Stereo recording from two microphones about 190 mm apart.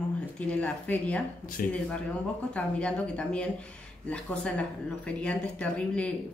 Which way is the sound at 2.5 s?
5° left (ahead or behind).